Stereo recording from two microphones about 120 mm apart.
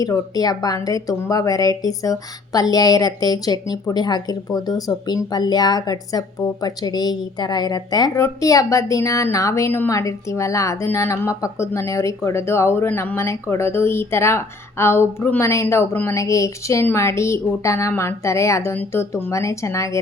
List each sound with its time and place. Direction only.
0.0 s a woman's voice: 30° left (ahead or behind)